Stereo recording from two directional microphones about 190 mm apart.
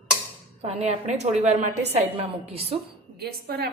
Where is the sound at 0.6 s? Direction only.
35° right (ahead or behind).